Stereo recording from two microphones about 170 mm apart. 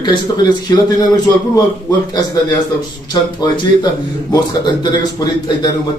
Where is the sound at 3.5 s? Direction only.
25° left (ahead or behind).